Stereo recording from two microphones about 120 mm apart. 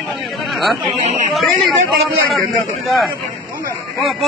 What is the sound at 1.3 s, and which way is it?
Speech, centre (ahead or behind).